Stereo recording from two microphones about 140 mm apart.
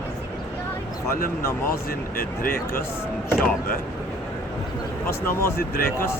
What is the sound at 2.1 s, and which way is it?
Speech, 90° left.